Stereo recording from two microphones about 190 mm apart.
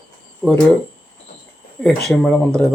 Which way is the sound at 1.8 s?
Centre (ahead or behind).